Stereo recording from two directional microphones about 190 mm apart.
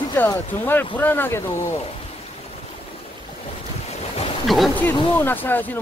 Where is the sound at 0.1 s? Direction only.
10° left (ahead or behind).